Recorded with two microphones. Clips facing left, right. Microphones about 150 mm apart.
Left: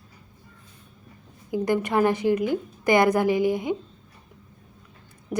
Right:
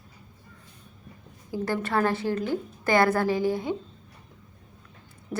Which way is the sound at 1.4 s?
15° left (ahead or behind).